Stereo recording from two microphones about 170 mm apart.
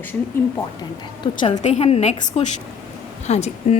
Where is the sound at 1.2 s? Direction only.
25° left (ahead or behind).